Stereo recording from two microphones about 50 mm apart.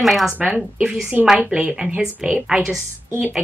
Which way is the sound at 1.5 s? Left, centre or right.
Centre.